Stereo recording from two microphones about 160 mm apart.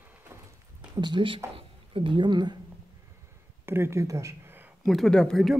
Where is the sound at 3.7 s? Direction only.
15° right (ahead or behind).